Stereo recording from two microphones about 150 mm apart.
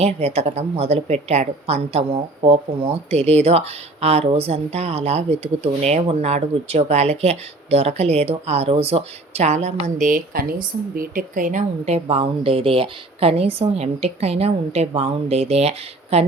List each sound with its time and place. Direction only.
0.0 s a woman's voice: 45° right (ahead or behind)